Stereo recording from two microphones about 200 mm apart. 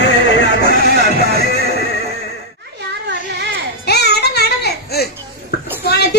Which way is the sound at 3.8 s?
55° left (ahead or behind).